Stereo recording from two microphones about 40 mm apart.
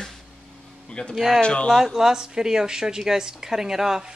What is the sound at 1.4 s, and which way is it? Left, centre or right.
Speech, left.